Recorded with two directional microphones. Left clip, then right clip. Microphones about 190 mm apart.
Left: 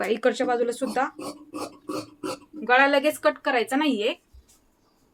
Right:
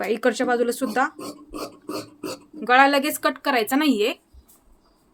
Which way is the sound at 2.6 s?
60° right (ahead or behind).